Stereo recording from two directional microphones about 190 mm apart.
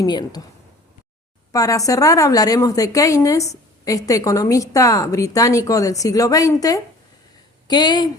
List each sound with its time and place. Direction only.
0.0 s speech: 20° left (ahead or behind)
1.5 s a woman's voice: 20° left (ahead or behind)